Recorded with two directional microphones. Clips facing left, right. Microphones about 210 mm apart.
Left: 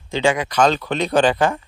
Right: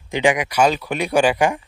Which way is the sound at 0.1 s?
15° right (ahead or behind).